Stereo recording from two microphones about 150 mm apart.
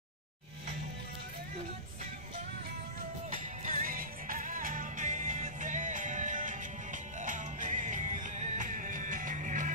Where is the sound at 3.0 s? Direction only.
65° right (ahead or behind).